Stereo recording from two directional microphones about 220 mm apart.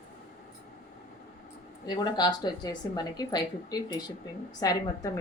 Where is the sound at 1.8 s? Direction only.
20° left (ahead or behind).